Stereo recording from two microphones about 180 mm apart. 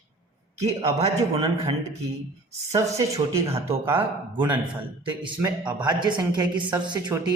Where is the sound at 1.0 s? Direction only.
35° right (ahead or behind).